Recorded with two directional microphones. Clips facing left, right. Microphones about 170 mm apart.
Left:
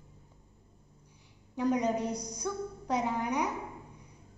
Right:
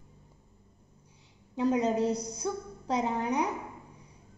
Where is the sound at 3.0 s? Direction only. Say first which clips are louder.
Right 2 dB; 30° right (ahead or behind).